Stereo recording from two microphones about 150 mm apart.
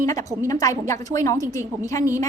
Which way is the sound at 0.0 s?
20° left (ahead or behind).